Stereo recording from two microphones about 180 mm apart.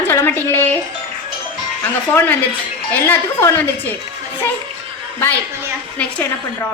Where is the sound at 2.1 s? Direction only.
10° left (ahead or behind).